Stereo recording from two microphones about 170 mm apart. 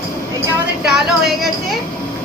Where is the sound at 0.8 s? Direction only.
5° right (ahead or behind).